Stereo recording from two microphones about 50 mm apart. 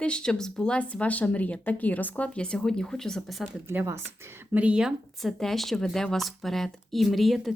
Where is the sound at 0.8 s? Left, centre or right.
Left; by 3.3 s centre.